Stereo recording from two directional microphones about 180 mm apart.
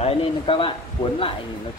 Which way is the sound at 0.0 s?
30° left (ahead or behind).